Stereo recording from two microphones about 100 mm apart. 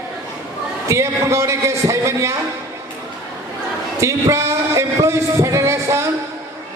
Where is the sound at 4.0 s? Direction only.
30° right (ahead or behind).